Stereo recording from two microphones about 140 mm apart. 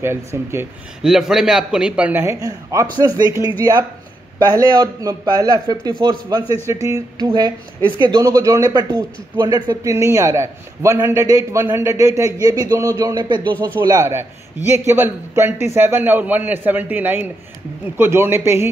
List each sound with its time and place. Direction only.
0.0 s a man's voice: 20° right (ahead or behind)
1.0 s a man's voice: centre (ahead or behind); by 13.5 s 30° right (ahead or behind)
13.5 s speech: 10° left (ahead or behind)
13.7 s a man's voice: 25° right (ahead or behind)